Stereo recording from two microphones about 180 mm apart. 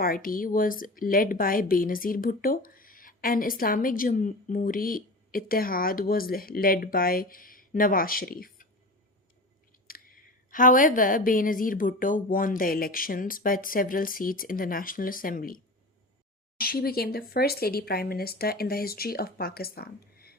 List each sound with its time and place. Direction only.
0.0 s speech: 50° left (ahead or behind)
9.7 s chewing: 55° left (ahead or behind)
10.5 s speech: 50° left (ahead or behind)